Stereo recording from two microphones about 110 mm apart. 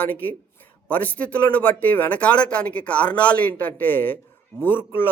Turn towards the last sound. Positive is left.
turn(degrees=20)  # may be behind; listen again after turning